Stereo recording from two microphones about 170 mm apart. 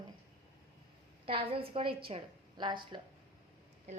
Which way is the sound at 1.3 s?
35° right (ahead or behind).